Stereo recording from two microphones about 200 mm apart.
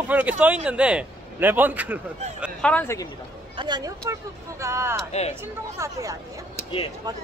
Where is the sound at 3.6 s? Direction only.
20° right (ahead or behind).